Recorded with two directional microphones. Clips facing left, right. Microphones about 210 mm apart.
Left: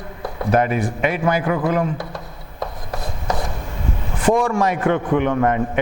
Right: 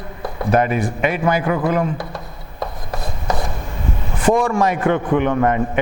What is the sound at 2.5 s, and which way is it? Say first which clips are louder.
Chopping: right 1 dB; 25° right (ahead or behind).